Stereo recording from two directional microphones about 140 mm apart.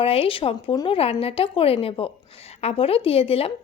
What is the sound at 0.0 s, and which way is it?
A woman's voice, 40° left (ahead or behind).